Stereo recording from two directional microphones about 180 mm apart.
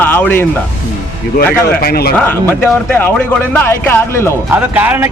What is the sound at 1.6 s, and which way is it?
Speech, 60° left (ahead or behind).